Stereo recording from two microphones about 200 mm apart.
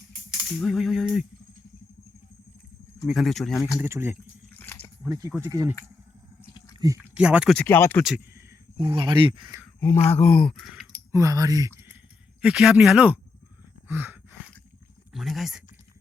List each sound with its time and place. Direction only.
0.6 s speech: centre (ahead or behind)
3.1 s speech: centre (ahead or behind)
3.8 s speech: 15° right (ahead or behind)
4.5 s biting: 10° left (ahead or behind)
5.0 s speech: 15° right (ahead or behind)
6.7 s a sound: 15° right (ahead or behind)
7.1 s speech: 5° right (ahead or behind); by 8.0 s 10° left (ahead or behind)
8.8 s speech: 25° right (ahead or behind)
10.1 s speech: 10° left (ahead or behind)
10.6 s a sound: centre (ahead or behind)
11.1 s speech: 15° right (ahead or behind)
12.4 s speech: 5° right (ahead or behind)
13.8 s gasp: 10° right (ahead or behind)
15.1 s speech: centre (ahead or behind)